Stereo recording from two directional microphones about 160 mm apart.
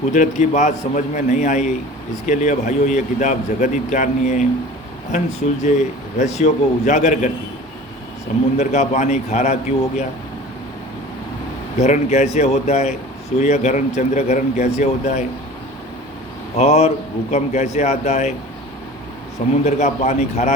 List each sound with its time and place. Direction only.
0.1 s speech: 50° left (ahead or behind)
8.5 s speech: 45° left (ahead or behind)
11.8 s speech: 45° left (ahead or behind)
16.6 s speech: 40° left (ahead or behind)
19.6 s speech: 45° left (ahead or behind)